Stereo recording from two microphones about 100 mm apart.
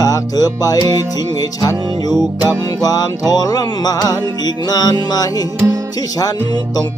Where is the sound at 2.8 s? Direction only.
40° left (ahead or behind).